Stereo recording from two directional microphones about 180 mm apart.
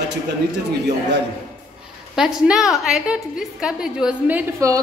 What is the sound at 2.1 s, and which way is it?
A woman's voice, 5° right (ahead or behind).